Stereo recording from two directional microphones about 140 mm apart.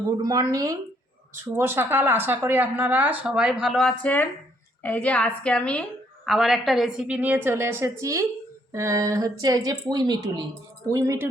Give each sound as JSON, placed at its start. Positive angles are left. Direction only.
{"t": 0.1, "sound": "a woman's voice", "side_deg": -25}